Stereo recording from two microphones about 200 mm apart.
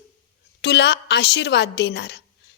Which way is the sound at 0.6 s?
60° left (ahead or behind).